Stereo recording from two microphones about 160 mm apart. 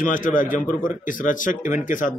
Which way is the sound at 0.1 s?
55° left (ahead or behind).